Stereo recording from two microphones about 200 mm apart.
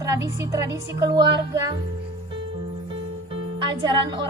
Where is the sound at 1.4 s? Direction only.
20° right (ahead or behind).